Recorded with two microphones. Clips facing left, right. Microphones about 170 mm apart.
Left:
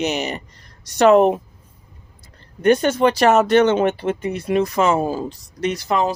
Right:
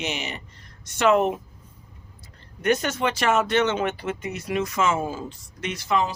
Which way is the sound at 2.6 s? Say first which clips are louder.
Left 8 dB; 30° left (ahead or behind).